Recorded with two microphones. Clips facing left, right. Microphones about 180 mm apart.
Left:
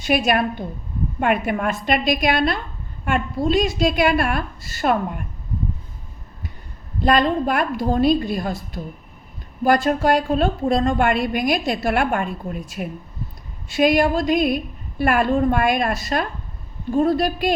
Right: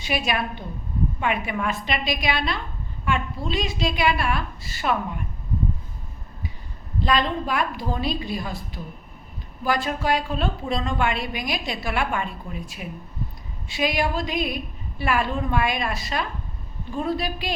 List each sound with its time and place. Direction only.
0.0 s a woman's voice: 50° left (ahead or behind)
7.0 s a woman's voice: 50° left (ahead or behind)